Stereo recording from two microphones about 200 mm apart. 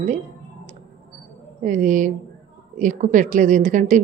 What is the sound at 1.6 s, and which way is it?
A woman's voice, 40° right (ahead or behind).